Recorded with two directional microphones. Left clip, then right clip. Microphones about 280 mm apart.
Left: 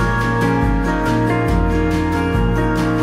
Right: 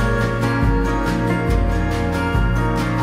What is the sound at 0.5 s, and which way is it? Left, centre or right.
Music, centre.